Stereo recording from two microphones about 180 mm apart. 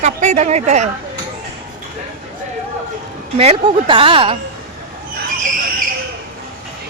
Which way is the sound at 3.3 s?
30° right (ahead or behind).